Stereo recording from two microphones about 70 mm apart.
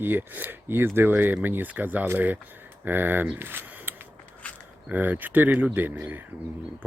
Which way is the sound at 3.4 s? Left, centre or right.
Right.